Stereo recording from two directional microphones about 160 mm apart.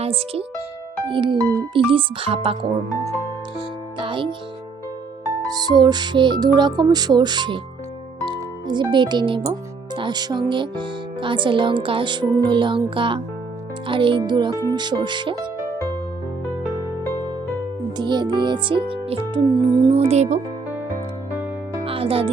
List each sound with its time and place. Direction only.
0.0 s speech: 35° right (ahead or behind)
3.9 s music: 30° right (ahead or behind)
5.5 s music: 25° right (ahead or behind)
8.2 s speech: 30° right (ahead or behind)
13.8 s music: 30° right (ahead or behind)
17.9 s music: 25° right (ahead or behind)
19.6 s music: 25° right (ahead or behind)
20.0 s speech: 45° right (ahead or behind)
21.8 s music: 35° right (ahead or behind)